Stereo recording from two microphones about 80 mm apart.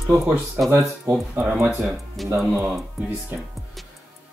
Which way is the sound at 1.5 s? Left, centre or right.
Centre.